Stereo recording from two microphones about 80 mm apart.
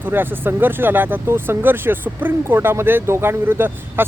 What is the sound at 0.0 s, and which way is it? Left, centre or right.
Speech, right.